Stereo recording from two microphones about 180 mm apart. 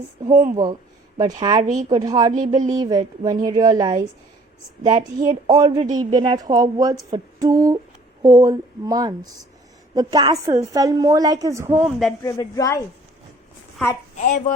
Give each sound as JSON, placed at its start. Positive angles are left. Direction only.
{"t": 0.3, "sound": "speech", "side_deg": -45}
{"t": 0.5, "sound": "a woman's voice", "side_deg": -25}
{"t": 12.2, "sound": "speech", "side_deg": 20}
{"t": 14.2, "sound": "speech", "side_deg": 45}